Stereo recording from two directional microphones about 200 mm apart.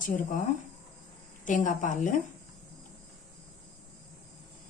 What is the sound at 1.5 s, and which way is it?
Speech, 40° left (ahead or behind).